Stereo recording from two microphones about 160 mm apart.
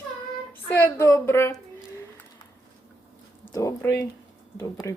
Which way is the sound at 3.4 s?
20° left (ahead or behind).